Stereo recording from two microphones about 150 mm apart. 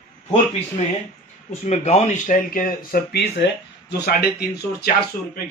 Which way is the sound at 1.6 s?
45° left (ahead or behind).